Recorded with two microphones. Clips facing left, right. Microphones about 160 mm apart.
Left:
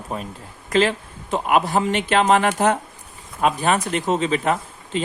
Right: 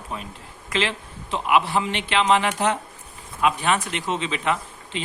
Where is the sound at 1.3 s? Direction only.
45° left (ahead or behind).